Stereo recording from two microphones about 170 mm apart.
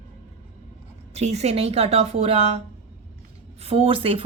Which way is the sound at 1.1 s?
40° right (ahead or behind).